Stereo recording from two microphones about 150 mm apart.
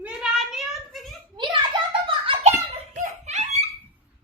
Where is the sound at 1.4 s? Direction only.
30° right (ahead or behind).